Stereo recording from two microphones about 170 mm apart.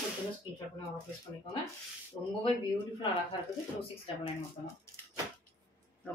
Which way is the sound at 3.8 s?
35° left (ahead or behind).